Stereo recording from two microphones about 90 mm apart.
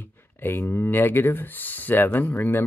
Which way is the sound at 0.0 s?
25° left (ahead or behind).